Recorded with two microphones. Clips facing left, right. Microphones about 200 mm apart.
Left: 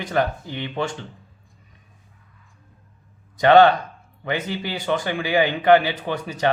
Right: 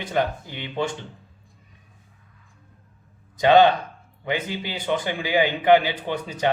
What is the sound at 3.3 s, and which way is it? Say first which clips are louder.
A man's voice: left 2 dB; 15° right (ahead or behind).